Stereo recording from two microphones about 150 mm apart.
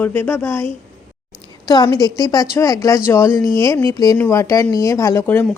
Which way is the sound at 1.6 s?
25° left (ahead or behind).